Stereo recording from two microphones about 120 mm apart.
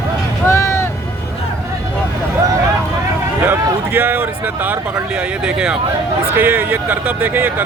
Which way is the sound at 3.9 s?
15° right (ahead or behind).